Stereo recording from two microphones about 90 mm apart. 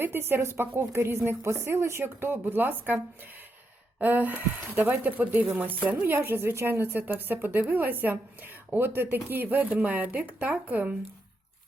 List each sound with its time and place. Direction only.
0.0 s speech: 25° right (ahead or behind)